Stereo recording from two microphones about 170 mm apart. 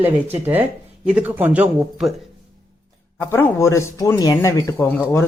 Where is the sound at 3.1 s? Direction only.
15° left (ahead or behind).